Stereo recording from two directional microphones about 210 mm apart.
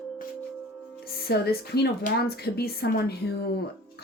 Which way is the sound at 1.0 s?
50° left (ahead or behind).